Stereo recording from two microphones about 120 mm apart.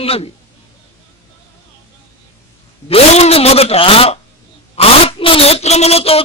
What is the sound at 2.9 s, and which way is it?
Speech, 60° left (ahead or behind).